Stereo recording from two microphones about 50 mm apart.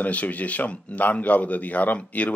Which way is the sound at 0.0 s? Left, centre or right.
Left.